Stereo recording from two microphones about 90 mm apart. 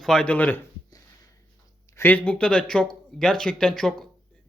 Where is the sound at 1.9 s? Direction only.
20° left (ahead or behind).